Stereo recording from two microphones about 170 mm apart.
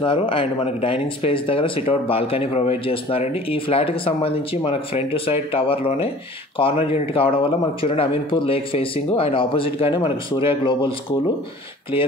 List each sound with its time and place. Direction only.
0.0 s speech: 30° left (ahead or behind)